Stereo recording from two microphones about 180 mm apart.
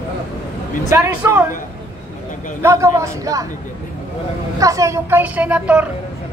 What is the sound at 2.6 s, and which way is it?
Speech, 15° right (ahead or behind).